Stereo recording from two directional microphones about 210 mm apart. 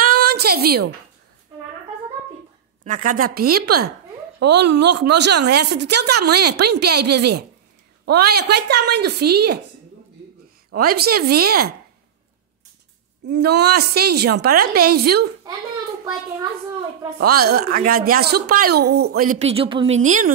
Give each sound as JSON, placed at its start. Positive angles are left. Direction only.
{"t": 0.0, "sound": "a sound", "side_deg": -45}
{"t": 2.8, "sound": "speech", "side_deg": -35}
{"t": 10.8, "sound": "speech", "side_deg": -45}
{"t": 13.3, "sound": "speech", "side_deg": -50}
{"t": 17.3, "sound": "speech", "side_deg": -45}